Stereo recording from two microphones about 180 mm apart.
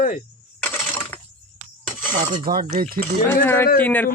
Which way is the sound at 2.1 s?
50° right (ahead or behind).